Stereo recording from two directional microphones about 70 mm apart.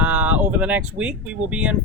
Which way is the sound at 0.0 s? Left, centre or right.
Right.